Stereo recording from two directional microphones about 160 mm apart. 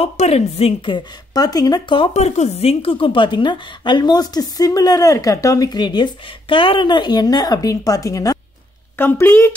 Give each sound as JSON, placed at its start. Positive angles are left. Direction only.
{"t": 0.0, "sound": "a woman's voice", "side_deg": 40}
{"t": 2.1, "sound": "a woman's voice", "side_deg": 45}